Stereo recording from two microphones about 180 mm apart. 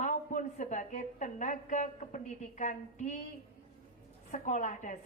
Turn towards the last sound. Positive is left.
turn(degrees=45)  # may be behind; listen again after turning